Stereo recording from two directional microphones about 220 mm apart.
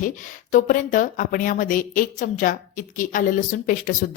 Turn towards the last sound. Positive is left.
turn(degrees=35)  # may be behind; listen again after turning